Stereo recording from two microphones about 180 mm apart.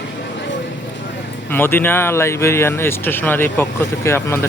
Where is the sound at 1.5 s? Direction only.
10° left (ahead or behind).